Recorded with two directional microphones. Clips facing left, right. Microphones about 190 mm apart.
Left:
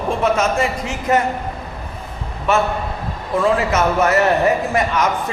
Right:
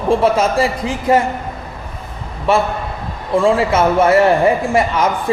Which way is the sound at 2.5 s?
30° right (ahead or behind).